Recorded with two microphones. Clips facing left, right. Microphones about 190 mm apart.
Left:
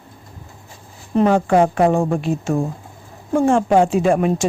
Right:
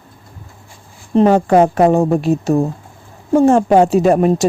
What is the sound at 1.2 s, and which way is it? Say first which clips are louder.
A woman's voice: right 4 dB; 40° right (ahead or behind).